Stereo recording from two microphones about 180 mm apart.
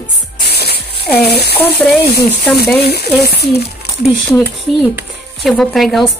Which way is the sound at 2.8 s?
60° left (ahead or behind).